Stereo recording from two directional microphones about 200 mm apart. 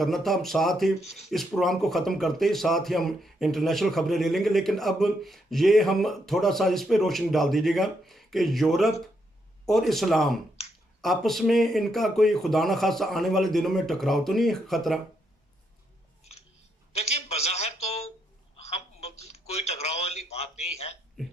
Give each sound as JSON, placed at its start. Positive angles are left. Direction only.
{"t": 0.0, "sound": "a man's voice", "side_deg": 0}
{"t": 16.9, "sound": "a sound", "side_deg": 30}
{"t": 18.5, "sound": "telephone", "side_deg": 30}
{"t": 21.2, "sound": "burping", "side_deg": 0}